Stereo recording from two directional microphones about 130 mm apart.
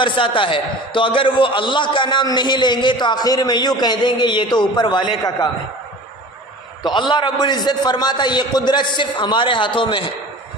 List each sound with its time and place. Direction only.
0.0 s a man's voice: 40° left (ahead or behind)
6.8 s a man's voice: 35° left (ahead or behind)